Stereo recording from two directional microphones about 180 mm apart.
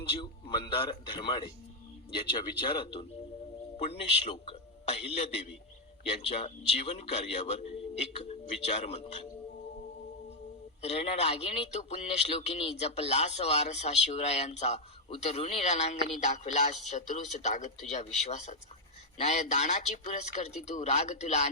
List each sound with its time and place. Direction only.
0.2 s a man's voice: 30° left (ahead or behind)
10.8 s speech: 35° left (ahead or behind)